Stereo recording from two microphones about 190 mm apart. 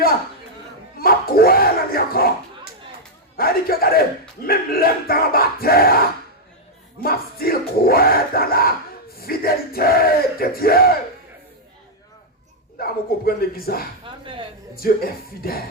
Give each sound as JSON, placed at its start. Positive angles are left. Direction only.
{"t": 0.9, "sound": "a sound", "side_deg": 50}
{"t": 3.3, "sound": "speech", "side_deg": 50}
{"t": 7.0, "sound": "speech", "side_deg": 50}
{"t": 12.8, "sound": "speech", "side_deg": 50}
{"t": 14.0, "sound": "speech", "side_deg": -25}
{"t": 14.8, "sound": "speech", "side_deg": 50}